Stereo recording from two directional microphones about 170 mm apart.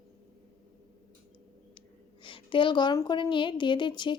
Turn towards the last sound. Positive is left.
turn(degrees=25)  # may be behind; listen again after turning